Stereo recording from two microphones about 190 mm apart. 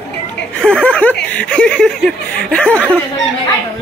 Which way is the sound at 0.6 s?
5° left (ahead or behind).